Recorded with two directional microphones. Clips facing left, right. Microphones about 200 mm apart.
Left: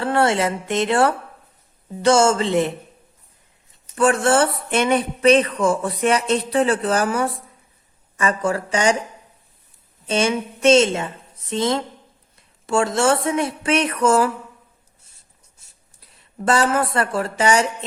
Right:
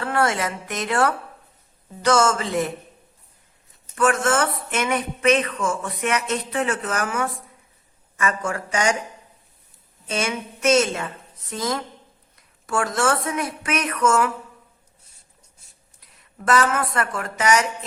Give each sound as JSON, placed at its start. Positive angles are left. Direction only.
{"t": 0.0, "sound": "a woman's voice", "side_deg": 30}
{"t": 3.9, "sound": "speech", "side_deg": 30}
{"t": 10.1, "sound": "a woman's voice", "side_deg": 30}
{"t": 16.0, "sound": "speech", "side_deg": 30}